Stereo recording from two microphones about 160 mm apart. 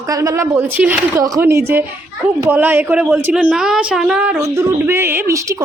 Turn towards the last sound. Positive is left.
turn(degrees=-20)  # may be behind; listen again after turning